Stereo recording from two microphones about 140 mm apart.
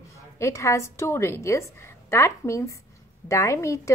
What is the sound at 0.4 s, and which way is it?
A woman's voice, 20° left (ahead or behind).